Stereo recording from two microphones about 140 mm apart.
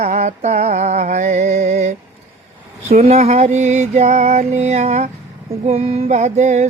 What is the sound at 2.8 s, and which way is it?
Music, 50° right (ahead or behind).